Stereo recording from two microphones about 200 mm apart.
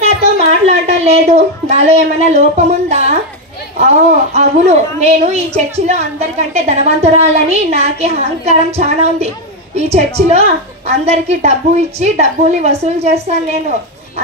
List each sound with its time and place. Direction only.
0.0 s a child's voice: 30° right (ahead or behind)